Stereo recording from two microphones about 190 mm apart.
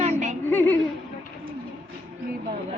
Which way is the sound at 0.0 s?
35° right (ahead or behind).